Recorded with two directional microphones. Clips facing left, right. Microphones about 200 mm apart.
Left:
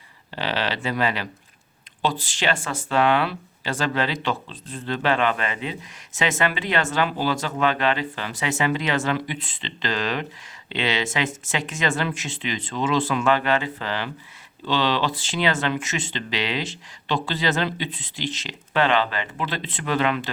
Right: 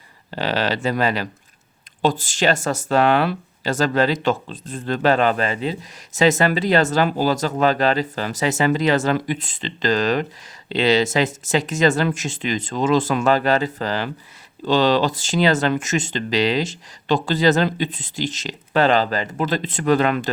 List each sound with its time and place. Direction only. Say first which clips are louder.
0.3 s speech: right 4 dB; 40° right (ahead or behind)